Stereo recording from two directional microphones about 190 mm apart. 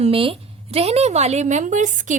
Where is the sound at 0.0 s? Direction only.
30° right (ahead or behind).